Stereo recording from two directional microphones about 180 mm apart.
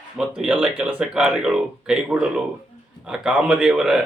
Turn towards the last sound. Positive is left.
turn(degrees=-5)  # may be behind; listen again after turning